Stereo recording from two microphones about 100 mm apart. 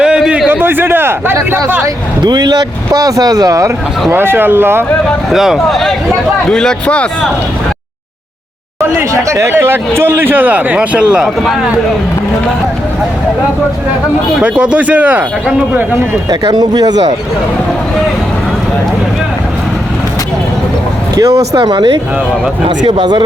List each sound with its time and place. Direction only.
0.0 s a sound: 10° right (ahead or behind)
0.6 s a man's voice: 20° right (ahead or behind)
2.2 s speech: 45° right (ahead or behind)
4.1 s a man's voice: 20° right (ahead or behind)
5.3 s speech: 5° right (ahead or behind); by 7.3 s 10° left (ahead or behind)
9.0 s a man's voice: 30° right (ahead or behind); by 11.5 s 10° right (ahead or behind)
14.4 s speech: 10° right (ahead or behind)
16.3 s speech: 40° right (ahead or behind)
21.2 s speech: 30° right (ahead or behind)
21.5 s speech: 45° right (ahead or behind)